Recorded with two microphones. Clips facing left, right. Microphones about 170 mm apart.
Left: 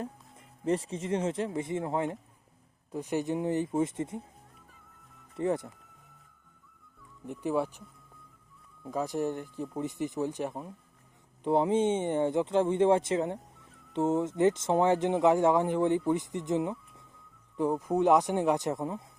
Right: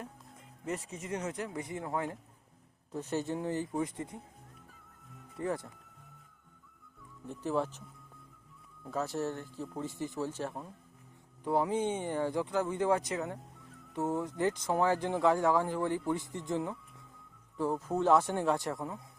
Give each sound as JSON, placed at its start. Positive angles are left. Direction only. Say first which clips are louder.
{"t": 0.6, "sound": "speech", "louder": "left 8 dB", "side_deg": 30}
{"t": 5.4, "sound": "speech", "louder": "left 5 dB", "side_deg": 20}
{"t": 7.3, "sound": "speech", "louder": "left 3 dB", "side_deg": 15}
{"t": 8.9, "sound": "speech", "louder": "left 3 dB", "side_deg": 15}